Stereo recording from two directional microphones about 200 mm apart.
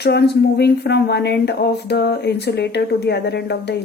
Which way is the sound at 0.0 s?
55° left (ahead or behind).